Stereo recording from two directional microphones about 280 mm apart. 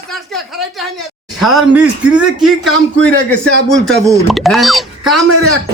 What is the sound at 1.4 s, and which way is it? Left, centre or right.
Speech, centre.